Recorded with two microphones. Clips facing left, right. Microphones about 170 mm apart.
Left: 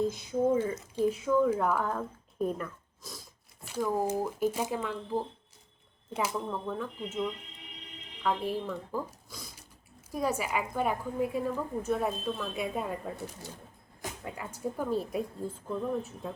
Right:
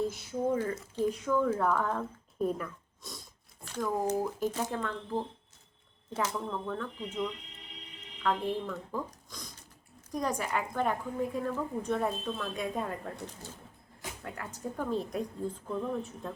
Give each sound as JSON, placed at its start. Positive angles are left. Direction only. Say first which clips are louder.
{"t": 0.1, "sound": "a woman's voice", "louder": "left 4 dB", "side_deg": 15}